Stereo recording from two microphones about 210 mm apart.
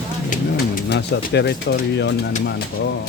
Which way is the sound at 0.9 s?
50° left (ahead or behind).